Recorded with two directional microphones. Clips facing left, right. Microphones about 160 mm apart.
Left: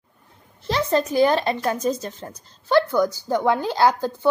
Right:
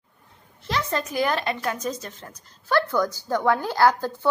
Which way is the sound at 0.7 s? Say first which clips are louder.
Left 6 dB; 30° left (ahead or behind).